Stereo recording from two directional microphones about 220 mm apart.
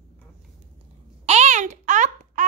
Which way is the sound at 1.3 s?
30° right (ahead or behind).